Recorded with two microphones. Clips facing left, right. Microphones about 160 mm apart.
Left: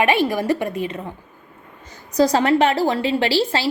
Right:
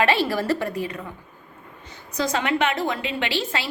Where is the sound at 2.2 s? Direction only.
35° left (ahead or behind).